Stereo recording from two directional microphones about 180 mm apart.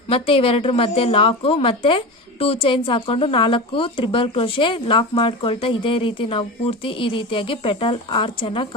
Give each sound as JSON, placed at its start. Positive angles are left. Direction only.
{"t": 0.1, "sound": "a woman's voice", "side_deg": 30}